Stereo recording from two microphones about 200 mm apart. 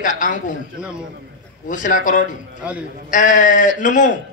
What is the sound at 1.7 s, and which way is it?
A man's voice, 40° left (ahead or behind).